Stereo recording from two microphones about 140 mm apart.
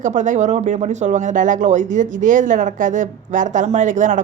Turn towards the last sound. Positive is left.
turn(degrees=-65)  # may be behind; listen again after turning